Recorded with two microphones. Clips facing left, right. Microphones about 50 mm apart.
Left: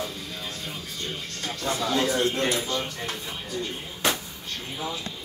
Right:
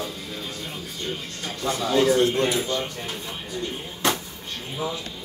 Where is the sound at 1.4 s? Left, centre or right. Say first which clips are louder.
Right 1 dB; right.